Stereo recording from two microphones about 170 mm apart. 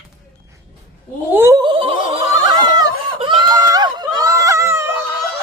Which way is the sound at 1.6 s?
30° right (ahead or behind).